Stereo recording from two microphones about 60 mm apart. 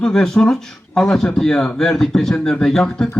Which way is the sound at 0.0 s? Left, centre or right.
Centre.